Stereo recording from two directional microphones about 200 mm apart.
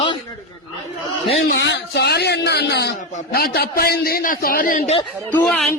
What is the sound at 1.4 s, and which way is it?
A man's voice, 60° left (ahead or behind).